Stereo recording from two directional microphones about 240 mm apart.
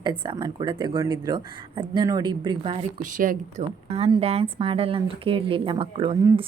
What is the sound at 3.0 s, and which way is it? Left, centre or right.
Speech, right.